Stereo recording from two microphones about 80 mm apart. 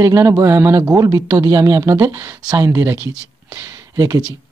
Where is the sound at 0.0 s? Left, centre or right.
Right.